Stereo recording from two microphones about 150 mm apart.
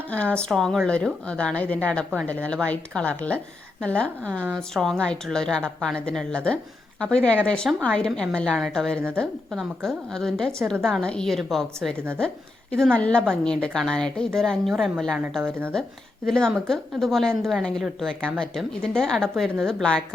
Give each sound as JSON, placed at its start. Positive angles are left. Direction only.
{"t": 0.1, "sound": "a woman's voice", "side_deg": 10}
{"t": 15.4, "sound": "speech", "side_deg": -15}
{"t": 16.2, "sound": "a woman's voice", "side_deg": 5}